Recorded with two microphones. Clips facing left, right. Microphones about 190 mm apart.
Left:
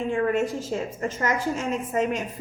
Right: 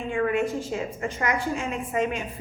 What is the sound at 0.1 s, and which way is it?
A woman's voice, 40° left (ahead or behind).